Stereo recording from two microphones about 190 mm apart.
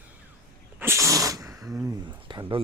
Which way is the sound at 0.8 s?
15° right (ahead or behind).